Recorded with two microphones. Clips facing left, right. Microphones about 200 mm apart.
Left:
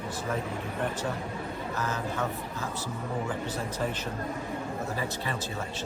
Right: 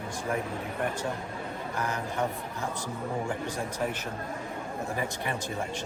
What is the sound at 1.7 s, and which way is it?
Speech, 15° right (ahead or behind).